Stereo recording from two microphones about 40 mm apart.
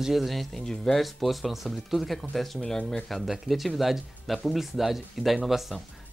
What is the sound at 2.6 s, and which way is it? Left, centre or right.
Speech, centre.